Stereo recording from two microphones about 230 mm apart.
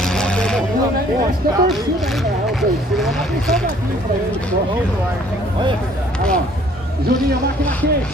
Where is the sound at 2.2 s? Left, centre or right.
Centre.